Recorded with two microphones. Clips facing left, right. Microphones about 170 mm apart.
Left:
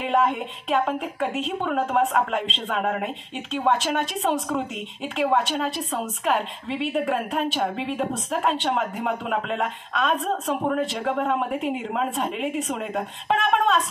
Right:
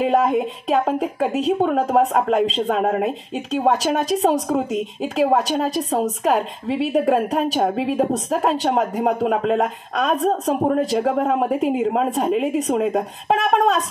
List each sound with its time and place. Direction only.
0.0 s a woman's voice: 40° right (ahead or behind)